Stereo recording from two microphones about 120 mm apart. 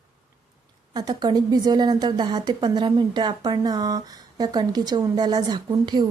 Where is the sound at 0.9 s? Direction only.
35° right (ahead or behind).